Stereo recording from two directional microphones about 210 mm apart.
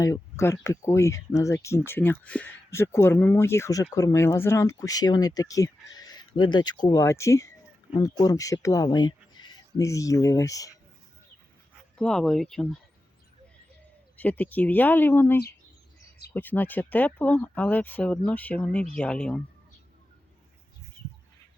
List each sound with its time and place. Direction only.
0.0 s speech: 15° left (ahead or behind)
11.9 s speech: 5° left (ahead or behind)
14.2 s speech: 5° left (ahead or behind)